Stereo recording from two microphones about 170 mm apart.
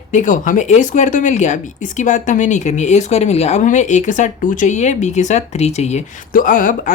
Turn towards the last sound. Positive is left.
turn(degrees=50)  # may be behind; listen again after turning